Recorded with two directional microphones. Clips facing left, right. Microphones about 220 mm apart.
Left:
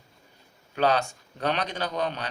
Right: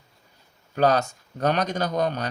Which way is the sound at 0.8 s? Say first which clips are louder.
Right 3 dB; 40° right (ahead or behind).